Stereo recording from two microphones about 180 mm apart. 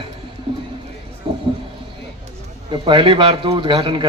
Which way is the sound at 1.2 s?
30° right (ahead or behind).